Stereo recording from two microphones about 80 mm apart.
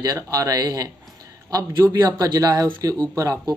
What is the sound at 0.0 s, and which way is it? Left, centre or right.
Speech, right.